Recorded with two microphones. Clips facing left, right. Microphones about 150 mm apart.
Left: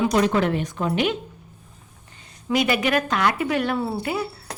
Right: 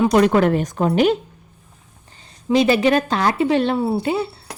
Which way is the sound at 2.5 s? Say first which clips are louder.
Right 6 dB; 30° right (ahead or behind).